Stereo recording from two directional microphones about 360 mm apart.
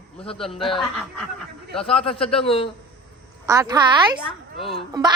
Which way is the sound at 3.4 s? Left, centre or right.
Centre.